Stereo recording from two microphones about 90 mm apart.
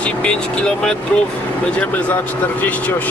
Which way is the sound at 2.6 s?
20° left (ahead or behind).